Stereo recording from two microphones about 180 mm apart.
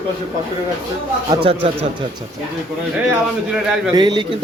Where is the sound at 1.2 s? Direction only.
30° right (ahead or behind).